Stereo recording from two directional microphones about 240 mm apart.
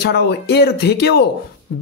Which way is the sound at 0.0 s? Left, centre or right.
Left.